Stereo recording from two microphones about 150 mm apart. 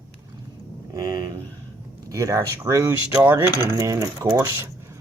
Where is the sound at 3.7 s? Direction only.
25° right (ahead or behind).